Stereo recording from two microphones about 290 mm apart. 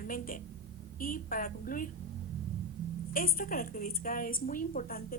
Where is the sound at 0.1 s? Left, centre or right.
Left.